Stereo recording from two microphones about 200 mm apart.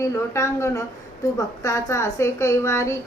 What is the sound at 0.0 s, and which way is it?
A woman's voice, 15° left (ahead or behind).